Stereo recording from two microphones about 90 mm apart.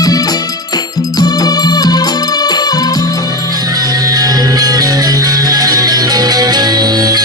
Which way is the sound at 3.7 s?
45° right (ahead or behind).